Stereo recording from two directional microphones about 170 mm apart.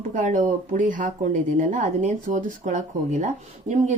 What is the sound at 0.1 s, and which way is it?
Speech, 45° right (ahead or behind).